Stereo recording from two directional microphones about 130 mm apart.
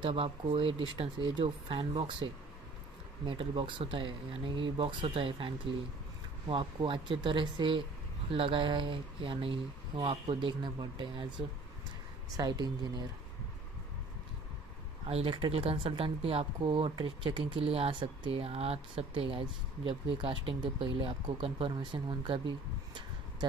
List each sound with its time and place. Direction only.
0.0 s speech: 45° right (ahead or behind)
6.5 s speech: 40° right (ahead or behind)
15.0 s speech: 50° right (ahead or behind)